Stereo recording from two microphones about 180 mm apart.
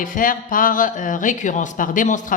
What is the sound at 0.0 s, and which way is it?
Speech, 45° left (ahead or behind).